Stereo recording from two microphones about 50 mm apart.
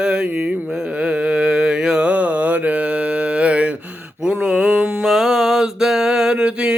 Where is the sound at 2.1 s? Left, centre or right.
Right.